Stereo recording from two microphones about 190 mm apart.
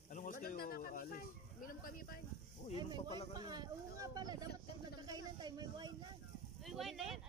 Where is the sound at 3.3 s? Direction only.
20° right (ahead or behind).